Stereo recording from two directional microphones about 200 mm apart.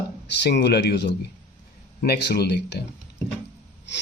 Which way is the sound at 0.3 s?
60° left (ahead or behind).